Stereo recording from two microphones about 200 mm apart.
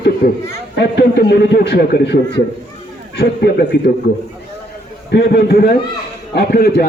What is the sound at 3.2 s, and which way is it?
Speech, 55° left (ahead or behind).